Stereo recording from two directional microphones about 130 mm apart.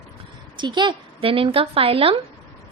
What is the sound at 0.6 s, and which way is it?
A woman's voice, 35° right (ahead or behind).